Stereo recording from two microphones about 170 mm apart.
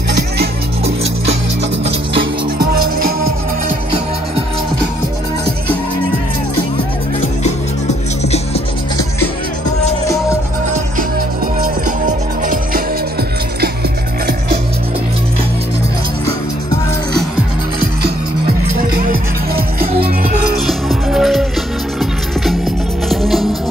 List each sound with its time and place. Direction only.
2.6 s music: 60° right (ahead or behind)
11.6 s music: 55° right (ahead or behind)
20.5 s music: centre (ahead or behind)
23.0 s music: centre (ahead or behind)